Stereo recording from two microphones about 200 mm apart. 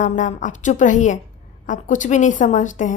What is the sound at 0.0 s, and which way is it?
A woman's voice, 40° left (ahead or behind).